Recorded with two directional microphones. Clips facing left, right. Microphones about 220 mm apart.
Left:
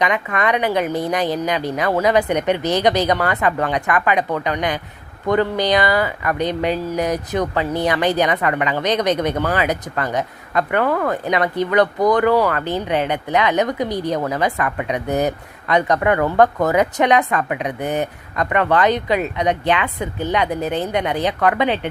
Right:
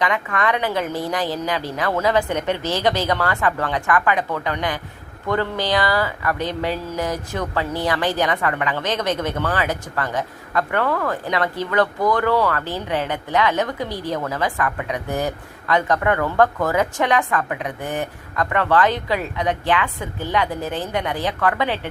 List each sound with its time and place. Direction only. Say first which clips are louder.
0.0 s a woman's voice: left 2 dB; 20° left (ahead or behind)